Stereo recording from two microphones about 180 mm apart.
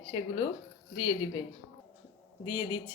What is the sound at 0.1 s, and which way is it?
Speech, 25° left (ahead or behind).